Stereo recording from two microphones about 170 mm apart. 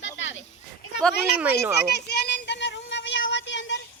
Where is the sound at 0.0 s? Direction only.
90° left.